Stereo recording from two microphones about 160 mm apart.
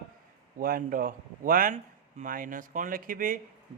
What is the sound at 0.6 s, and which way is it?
Speech, 65° right (ahead or behind).